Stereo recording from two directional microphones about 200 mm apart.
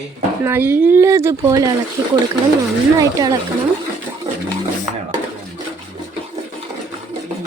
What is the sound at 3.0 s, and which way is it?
Speech, 15° right (ahead or behind).